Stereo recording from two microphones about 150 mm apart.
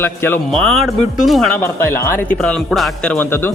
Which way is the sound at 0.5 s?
5° left (ahead or behind).